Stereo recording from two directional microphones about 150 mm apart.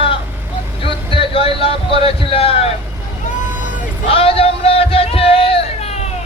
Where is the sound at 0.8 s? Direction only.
35° left (ahead or behind).